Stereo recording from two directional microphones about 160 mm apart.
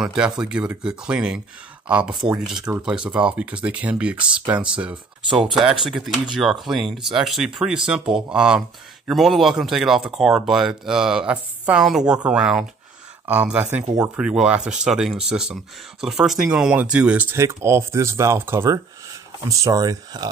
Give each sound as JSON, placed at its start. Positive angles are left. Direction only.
{"t": 0.0, "sound": "speech", "side_deg": -5}